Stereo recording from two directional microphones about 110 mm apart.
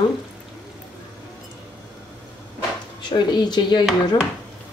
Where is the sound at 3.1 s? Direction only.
40° left (ahead or behind).